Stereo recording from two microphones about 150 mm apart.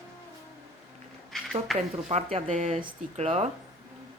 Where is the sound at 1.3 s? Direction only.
Centre (ahead or behind).